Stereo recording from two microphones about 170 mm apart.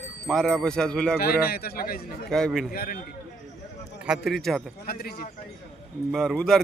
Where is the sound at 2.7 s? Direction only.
60° left (ahead or behind).